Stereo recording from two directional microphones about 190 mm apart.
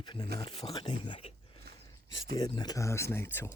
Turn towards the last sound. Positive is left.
turn(degrees=10)  # may be behind; listen again after turning